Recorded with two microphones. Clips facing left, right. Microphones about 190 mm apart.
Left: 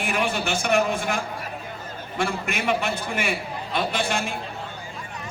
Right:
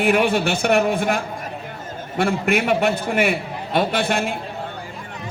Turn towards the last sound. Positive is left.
turn(degrees=-60)  # may be behind; listen again after turning